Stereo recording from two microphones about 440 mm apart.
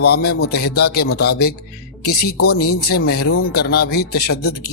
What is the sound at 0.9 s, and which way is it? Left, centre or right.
Speech, left.